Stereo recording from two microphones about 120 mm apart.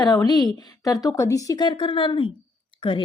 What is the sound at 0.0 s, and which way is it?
A woman's voice, 35° left (ahead or behind).